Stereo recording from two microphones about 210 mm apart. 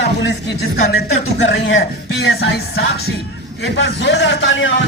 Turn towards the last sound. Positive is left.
turn(degrees=60)  # may be behind; listen again after turning